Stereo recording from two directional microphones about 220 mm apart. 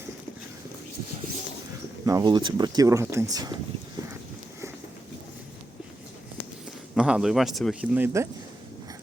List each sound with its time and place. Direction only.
2.0 s speech: 15° right (ahead or behind)
6.9 s a man's voice: 5° right (ahead or behind)